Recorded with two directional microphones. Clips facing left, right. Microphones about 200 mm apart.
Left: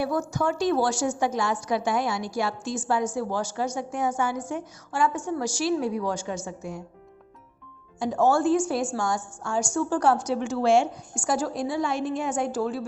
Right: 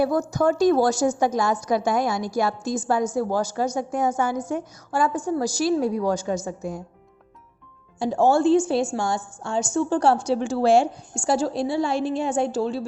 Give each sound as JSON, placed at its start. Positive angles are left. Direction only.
{"t": 0.0, "sound": "a woman's voice", "side_deg": -40}
{"t": 7.9, "sound": "a woman's voice", "side_deg": -30}